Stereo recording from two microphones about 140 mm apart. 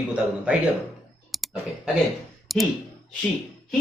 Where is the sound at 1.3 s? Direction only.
Centre (ahead or behind).